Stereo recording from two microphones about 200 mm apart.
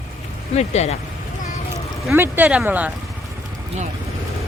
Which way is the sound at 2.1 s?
10° right (ahead or behind).